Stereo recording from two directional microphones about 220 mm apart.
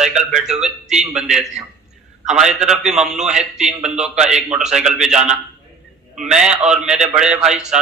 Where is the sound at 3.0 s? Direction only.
30° right (ahead or behind).